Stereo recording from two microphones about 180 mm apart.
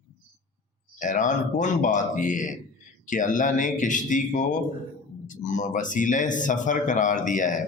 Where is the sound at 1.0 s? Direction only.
45° left (ahead or behind).